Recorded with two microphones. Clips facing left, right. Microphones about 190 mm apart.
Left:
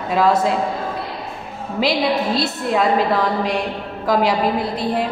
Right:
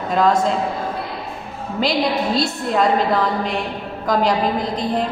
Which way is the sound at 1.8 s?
Centre (ahead or behind).